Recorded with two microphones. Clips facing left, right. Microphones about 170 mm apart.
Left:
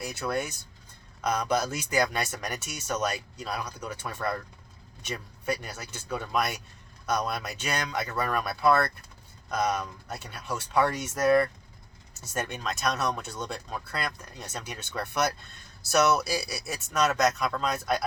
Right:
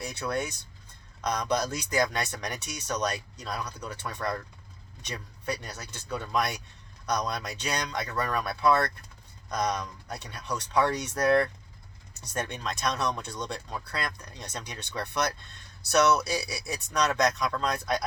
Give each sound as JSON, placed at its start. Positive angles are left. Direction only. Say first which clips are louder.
{"t": 0.0, "sound": "speech", "louder": "left 1 dB", "side_deg": 5}